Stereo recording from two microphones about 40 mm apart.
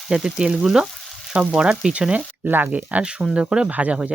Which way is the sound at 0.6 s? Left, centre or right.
Centre.